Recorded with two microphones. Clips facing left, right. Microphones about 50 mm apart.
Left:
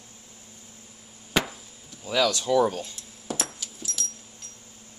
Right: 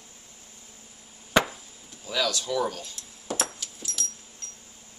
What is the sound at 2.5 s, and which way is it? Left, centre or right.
Speech, centre.